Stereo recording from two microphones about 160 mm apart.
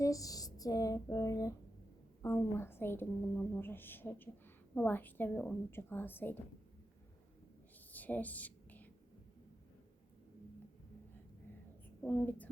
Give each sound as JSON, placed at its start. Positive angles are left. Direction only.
{"t": 0.0, "sound": "speech", "side_deg": 20}
{"t": 7.9, "sound": "a sound", "side_deg": 10}
{"t": 12.0, "sound": "speech", "side_deg": 10}